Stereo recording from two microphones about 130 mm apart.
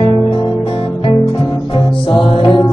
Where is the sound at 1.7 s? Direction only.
40° left (ahead or behind).